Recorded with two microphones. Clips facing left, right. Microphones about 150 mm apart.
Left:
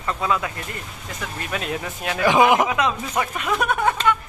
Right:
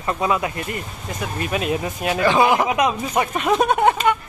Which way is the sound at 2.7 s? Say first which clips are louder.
Right 3 dB; 20° right (ahead or behind).